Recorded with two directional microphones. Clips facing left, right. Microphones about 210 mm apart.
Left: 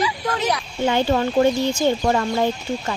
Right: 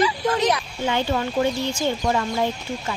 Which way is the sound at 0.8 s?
45° left (ahead or behind).